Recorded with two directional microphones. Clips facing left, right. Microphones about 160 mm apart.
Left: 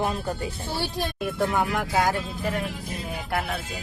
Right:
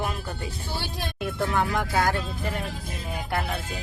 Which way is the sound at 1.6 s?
15° left (ahead or behind).